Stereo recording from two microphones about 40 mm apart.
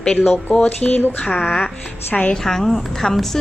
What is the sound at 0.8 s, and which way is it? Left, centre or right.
Speech, centre.